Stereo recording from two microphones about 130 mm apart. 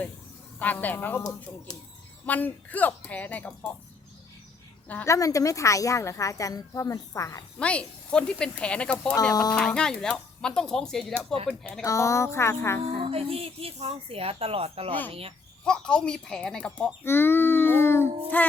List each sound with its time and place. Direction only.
0.6 s speech: 15° left (ahead or behind)
1.2 s speech: 30° left (ahead or behind)
2.2 s speech: 10° left (ahead or behind)
4.9 s speech: 15° left (ahead or behind)
5.1 s speech: 25° left (ahead or behind)
7.6 s speech: 10° left (ahead or behind)
11.9 s speech: 25° left (ahead or behind)
12.8 s speech: 50° right (ahead or behind)
15.6 s speech: 5° left (ahead or behind)